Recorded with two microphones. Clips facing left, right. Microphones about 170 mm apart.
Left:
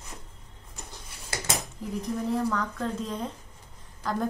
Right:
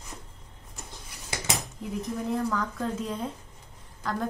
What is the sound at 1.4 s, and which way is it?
A woman's voice, centre (ahead or behind).